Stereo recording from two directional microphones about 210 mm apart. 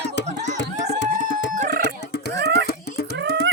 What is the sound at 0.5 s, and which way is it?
Music, 55° left (ahead or behind).